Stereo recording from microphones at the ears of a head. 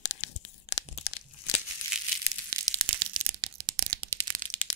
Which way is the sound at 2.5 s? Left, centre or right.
Right.